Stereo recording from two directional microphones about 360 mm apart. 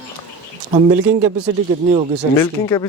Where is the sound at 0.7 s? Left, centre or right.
Centre.